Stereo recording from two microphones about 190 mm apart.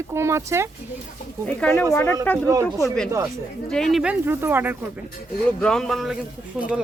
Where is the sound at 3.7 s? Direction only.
Centre (ahead or behind).